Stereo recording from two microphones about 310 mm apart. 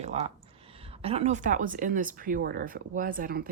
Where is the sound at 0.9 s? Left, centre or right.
Centre.